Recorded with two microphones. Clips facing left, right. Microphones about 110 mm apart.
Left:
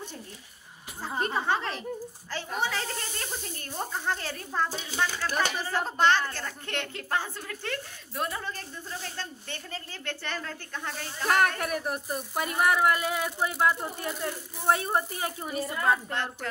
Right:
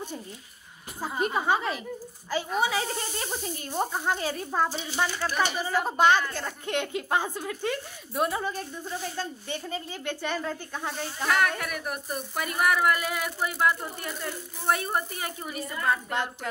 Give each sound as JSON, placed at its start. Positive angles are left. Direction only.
{"t": 1.2, "sound": "a woman's voice", "side_deg": -10}
{"t": 11.2, "sound": "speech", "side_deg": 40}